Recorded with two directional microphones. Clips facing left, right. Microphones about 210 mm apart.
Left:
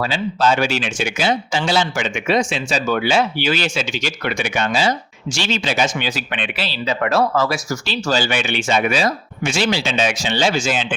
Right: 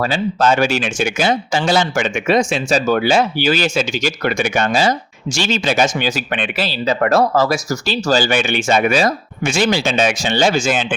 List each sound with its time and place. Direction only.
0.0 s speech: 45° right (ahead or behind)